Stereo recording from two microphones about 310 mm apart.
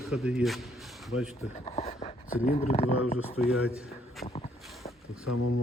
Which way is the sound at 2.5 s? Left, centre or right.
Left.